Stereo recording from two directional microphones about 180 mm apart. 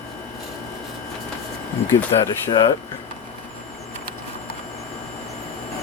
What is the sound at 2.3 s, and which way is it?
Speech, 20° left (ahead or behind).